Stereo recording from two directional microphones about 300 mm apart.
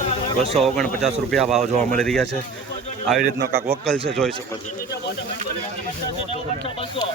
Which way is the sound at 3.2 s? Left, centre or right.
Right.